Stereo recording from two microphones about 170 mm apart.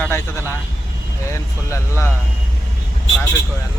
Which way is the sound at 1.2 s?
15° left (ahead or behind).